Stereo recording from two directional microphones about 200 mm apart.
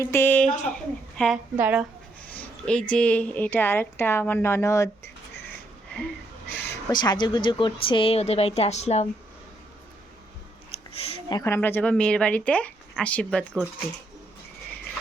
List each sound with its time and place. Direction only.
0.0 s a woman's voice: 10° left (ahead or behind)
1.5 s speech: 10° right (ahead or behind)
2.3 s a woman's voice: 5° left (ahead or behind)
6.9 s a woman's voice: 20° left (ahead or behind)
10.7 s a woman's voice: 30° left (ahead or behind); by 13.7 s centre (ahead or behind)